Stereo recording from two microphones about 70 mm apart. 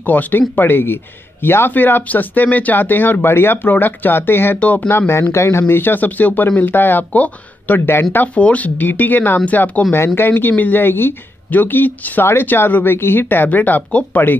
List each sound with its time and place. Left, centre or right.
0.0 s speech: left
9.9 s speech: left